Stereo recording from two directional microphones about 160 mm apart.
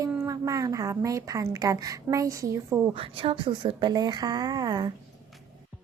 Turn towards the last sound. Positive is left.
turn(degrees=-25)  # may be behind; listen again after turning